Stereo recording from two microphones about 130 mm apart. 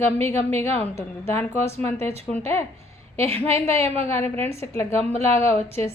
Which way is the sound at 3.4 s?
20° left (ahead or behind).